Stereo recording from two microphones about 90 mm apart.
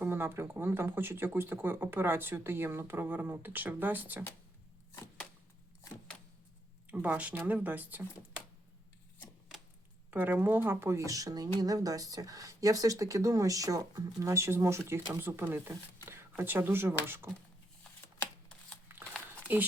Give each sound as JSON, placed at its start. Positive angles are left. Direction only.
{"t": 0.0, "sound": "speech", "side_deg": -25}
{"t": 6.9, "sound": "speech", "side_deg": -15}
{"t": 10.1, "sound": "speech", "side_deg": -20}
{"t": 19.5, "sound": "speech", "side_deg": -20}